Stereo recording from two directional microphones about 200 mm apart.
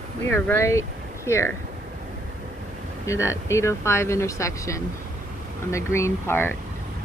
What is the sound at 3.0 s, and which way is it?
Speech, 15° left (ahead or behind).